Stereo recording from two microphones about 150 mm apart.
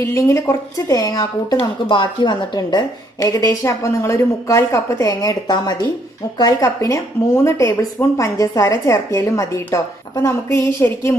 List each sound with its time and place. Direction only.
0.0 s a woman's voice: 20° left (ahead or behind)